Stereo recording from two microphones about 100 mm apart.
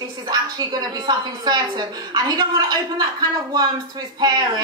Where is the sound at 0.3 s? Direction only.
40° right (ahead or behind).